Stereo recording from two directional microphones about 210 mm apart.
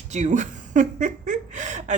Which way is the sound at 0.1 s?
35° right (ahead or behind).